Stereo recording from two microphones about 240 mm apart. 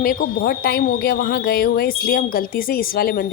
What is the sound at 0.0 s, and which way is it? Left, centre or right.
A woman's voice, left.